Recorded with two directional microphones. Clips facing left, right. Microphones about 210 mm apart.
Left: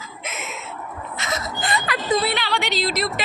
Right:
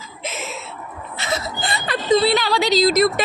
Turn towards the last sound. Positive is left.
turn(degrees=-45)  # may be behind; listen again after turning